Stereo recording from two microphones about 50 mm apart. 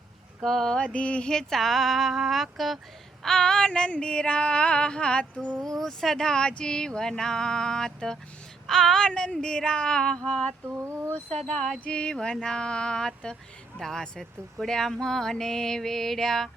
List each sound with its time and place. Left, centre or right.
0.4 s speech: centre
0.9 s female singing: left
1.3 s speech: centre
3.2 s female singing: centre
5.5 s speech: centre
8.6 s child singing: centre
9.0 s speech: centre
11.3 s speech: centre
11.9 s speech: left